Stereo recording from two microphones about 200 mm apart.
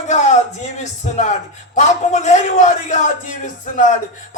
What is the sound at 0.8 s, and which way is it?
Speech, 35° left (ahead or behind).